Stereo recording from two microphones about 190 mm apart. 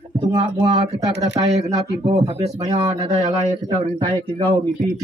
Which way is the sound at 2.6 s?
20° right (ahead or behind).